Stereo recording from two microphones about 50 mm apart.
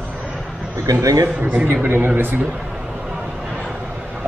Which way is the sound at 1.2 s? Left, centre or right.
Right.